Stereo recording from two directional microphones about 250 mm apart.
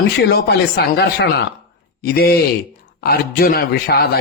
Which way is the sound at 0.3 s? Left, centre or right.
Left.